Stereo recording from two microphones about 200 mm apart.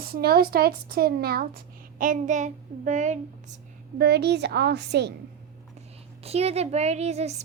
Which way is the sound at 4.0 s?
55° right (ahead or behind).